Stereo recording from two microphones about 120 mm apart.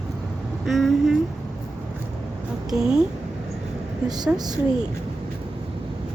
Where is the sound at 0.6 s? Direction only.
Centre (ahead or behind).